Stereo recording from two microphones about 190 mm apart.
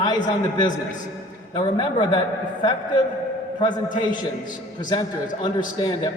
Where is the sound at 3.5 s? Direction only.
25° left (ahead or behind).